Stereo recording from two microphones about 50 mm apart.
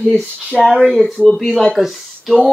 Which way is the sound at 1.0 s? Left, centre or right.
Centre.